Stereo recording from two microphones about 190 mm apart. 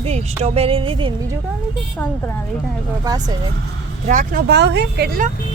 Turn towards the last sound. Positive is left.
turn(degrees=-60)  # may be behind; listen again after turning